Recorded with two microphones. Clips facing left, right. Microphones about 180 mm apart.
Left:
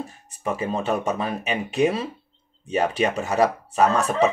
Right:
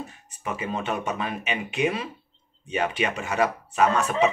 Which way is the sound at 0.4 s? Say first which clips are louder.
Left 4 dB; 35° left (ahead or behind).